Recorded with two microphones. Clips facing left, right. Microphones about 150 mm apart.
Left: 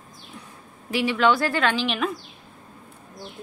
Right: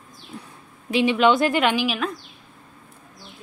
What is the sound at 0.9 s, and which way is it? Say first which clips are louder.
Speech: right 3 dB; 20° right (ahead or behind).